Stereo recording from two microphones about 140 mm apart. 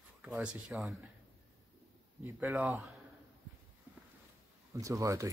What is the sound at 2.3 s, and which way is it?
Speech, 15° right (ahead or behind).